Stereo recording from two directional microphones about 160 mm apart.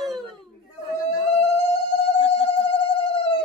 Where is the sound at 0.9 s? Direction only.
40° left (ahead or behind).